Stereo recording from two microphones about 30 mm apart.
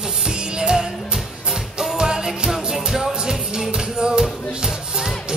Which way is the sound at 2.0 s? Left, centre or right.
Right.